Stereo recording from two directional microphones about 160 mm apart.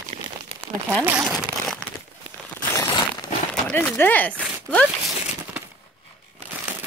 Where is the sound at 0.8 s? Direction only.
15° right (ahead or behind).